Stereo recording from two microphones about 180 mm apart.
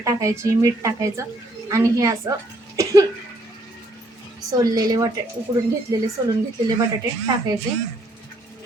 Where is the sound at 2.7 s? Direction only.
20° right (ahead or behind).